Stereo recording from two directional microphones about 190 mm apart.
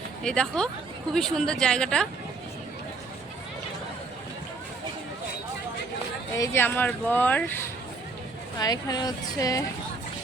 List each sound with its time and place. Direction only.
0.3 s speech: 5° left (ahead or behind)
6.3 s speech: 15° left (ahead or behind)
8.5 s a woman's voice: 20° left (ahead or behind)